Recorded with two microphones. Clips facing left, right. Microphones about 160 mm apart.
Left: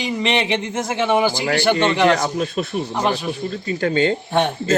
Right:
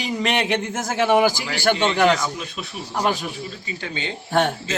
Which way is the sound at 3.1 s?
50° left (ahead or behind).